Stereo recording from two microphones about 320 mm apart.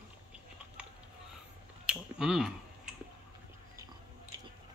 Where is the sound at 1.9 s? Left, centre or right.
Centre.